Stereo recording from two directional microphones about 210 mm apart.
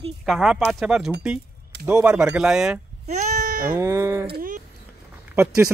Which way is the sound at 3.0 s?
35° right (ahead or behind).